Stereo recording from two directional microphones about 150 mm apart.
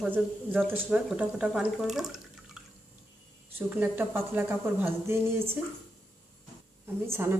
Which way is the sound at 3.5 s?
15° right (ahead or behind).